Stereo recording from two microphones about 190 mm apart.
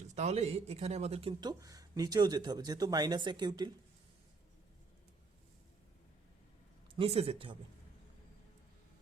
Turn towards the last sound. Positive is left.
turn(degrees=-30)  # may be behind; listen again after turning